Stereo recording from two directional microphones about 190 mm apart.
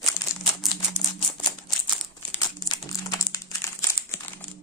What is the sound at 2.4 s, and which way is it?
Crumpling, 15° left (ahead or behind).